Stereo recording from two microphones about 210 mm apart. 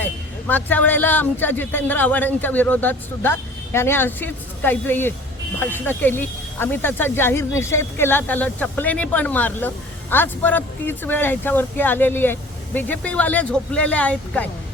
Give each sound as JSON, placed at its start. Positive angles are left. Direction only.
{"t": 0.0, "sound": "speech", "side_deg": 10}